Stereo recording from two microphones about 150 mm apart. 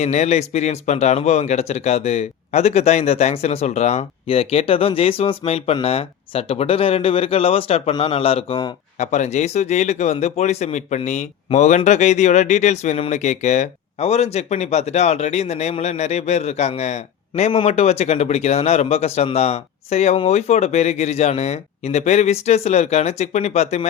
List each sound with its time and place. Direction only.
0.0 s a man's voice: 50° left (ahead or behind)
9.0 s a man's voice: 50° left (ahead or behind)